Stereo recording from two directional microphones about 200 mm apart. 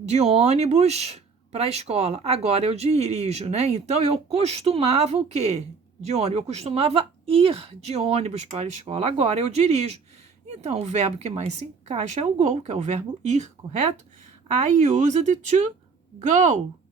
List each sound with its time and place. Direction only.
0.1 s speech: 35° right (ahead or behind)
14.8 s speech: 35° right (ahead or behind)